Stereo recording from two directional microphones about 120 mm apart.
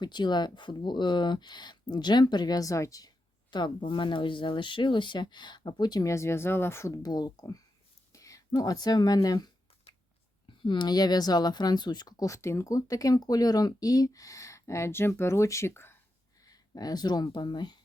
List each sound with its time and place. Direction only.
0.0 s speech: 40° left (ahead or behind)
3.5 s speech: 40° left (ahead or behind)
10.6 s speech: 40° left (ahead or behind); by 16.0 s 20° left (ahead or behind)
16.5 s speech: 30° left (ahead or behind)